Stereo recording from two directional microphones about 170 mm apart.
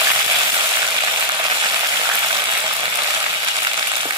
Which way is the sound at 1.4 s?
25° right (ahead or behind).